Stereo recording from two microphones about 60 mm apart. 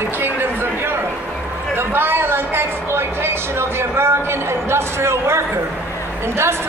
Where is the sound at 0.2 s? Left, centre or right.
Right.